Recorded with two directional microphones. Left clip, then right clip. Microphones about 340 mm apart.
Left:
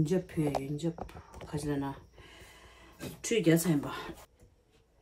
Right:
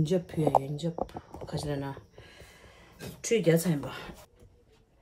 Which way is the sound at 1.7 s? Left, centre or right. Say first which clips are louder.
Even; centre.